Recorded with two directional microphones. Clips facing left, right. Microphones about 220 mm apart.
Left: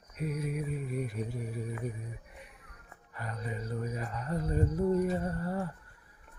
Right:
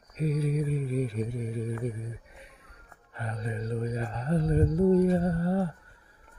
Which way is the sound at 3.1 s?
25° right (ahead or behind).